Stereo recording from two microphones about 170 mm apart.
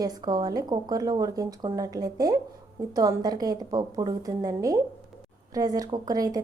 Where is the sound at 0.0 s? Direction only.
20° right (ahead or behind).